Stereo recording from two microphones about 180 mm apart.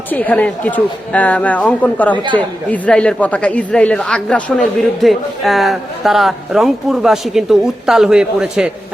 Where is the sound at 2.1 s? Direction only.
25° right (ahead or behind).